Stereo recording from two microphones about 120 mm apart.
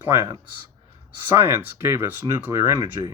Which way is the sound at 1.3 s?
20° right (ahead or behind).